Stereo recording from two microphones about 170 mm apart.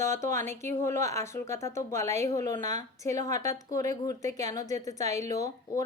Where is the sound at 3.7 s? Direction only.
20° left (ahead or behind).